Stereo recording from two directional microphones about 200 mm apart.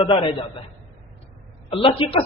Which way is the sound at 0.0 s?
25° left (ahead or behind).